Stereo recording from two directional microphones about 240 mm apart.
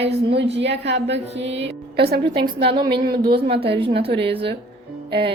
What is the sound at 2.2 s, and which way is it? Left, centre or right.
A woman's voice, right.